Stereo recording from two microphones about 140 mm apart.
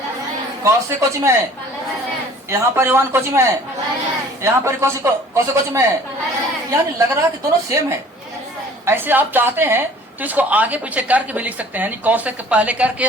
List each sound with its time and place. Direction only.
0.6 s a man's voice: 20° right (ahead or behind)
2.5 s a man's voice: 15° right (ahead or behind)